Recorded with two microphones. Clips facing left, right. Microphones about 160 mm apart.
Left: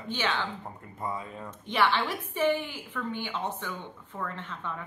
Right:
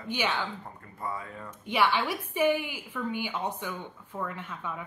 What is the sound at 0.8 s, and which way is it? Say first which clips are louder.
Speech: left 1 dB; 20° left (ahead or behind).